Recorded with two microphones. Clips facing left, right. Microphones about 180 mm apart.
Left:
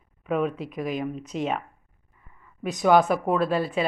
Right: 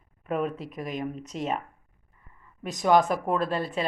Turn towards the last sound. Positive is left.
turn(degrees=5)  # may be behind; listen again after turning